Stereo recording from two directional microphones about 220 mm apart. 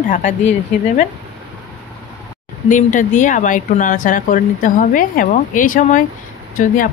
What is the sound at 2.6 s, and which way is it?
Speech, 35° left (ahead or behind).